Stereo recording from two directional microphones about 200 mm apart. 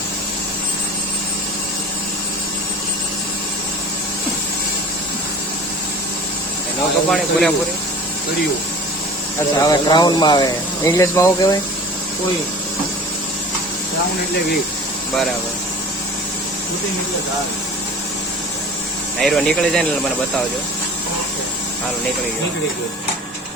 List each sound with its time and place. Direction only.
7.1 s speech: 5° left (ahead or behind)
9.6 s speech: 20° left (ahead or behind)
19.2 s speech: centre (ahead or behind)